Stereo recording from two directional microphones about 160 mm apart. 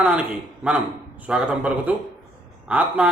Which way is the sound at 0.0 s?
10° right (ahead or behind).